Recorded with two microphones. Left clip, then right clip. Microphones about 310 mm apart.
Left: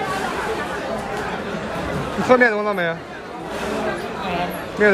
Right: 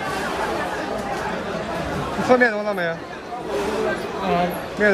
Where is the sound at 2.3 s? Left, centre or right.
Centre.